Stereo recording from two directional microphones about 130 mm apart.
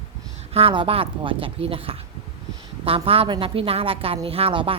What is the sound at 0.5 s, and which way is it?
Speech, 45° right (ahead or behind).